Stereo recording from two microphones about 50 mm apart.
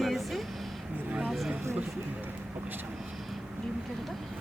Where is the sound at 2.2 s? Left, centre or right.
Right.